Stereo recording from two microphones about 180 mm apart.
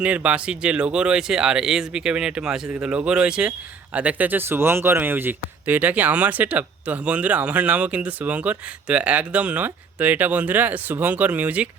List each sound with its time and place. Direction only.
0.0 s speech: 5° right (ahead or behind)